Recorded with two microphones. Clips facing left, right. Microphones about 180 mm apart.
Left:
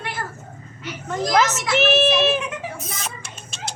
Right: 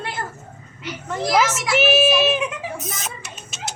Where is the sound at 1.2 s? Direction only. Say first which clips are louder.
Even; 5° right (ahead or behind).